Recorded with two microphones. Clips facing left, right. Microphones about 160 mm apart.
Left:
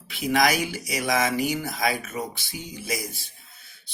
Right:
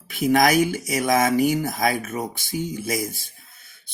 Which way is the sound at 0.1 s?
50° right (ahead or behind).